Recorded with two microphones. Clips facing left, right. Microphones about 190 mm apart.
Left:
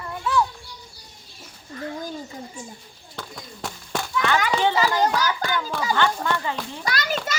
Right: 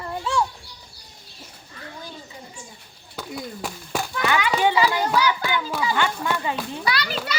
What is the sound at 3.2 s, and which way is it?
A woman's voice, 5° right (ahead or behind).